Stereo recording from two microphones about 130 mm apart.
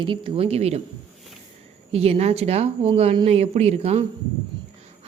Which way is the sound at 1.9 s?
50° right (ahead or behind).